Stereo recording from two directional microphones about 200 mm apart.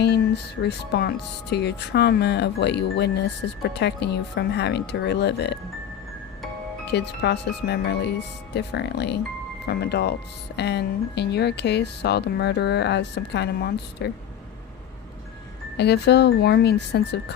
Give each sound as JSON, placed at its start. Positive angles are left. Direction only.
{"t": 0.6, "sound": "speech", "side_deg": 55}
{"t": 6.9, "sound": "speech", "side_deg": 60}
{"t": 15.8, "sound": "speech", "side_deg": 55}